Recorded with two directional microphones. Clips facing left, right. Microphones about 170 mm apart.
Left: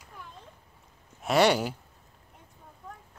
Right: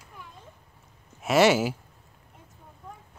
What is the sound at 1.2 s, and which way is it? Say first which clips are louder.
Speech: right 3 dB; 5° right (ahead or behind).